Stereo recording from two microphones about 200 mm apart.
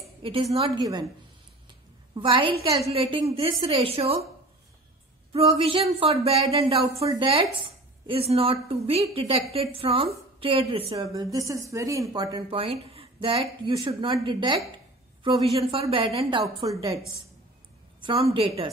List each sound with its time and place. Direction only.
0.0 s a woman's voice: 25° right (ahead or behind)
1.7 s a sound: 25° right (ahead or behind)
2.9 s speech: 25° right (ahead or behind)
5.3 s speech: 30° right (ahead or behind)
11.3 s speech: 15° right (ahead or behind)
18.0 s speech: 25° right (ahead or behind)